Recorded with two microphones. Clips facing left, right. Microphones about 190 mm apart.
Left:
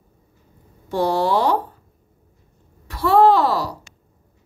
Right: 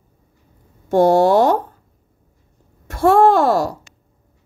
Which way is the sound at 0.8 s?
45° right (ahead or behind).